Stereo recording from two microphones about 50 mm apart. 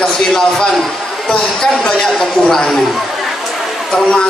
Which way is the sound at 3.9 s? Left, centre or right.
Left.